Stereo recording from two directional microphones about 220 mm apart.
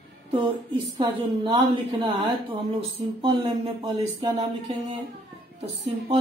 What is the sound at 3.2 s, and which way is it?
Speech, 25° right (ahead or behind).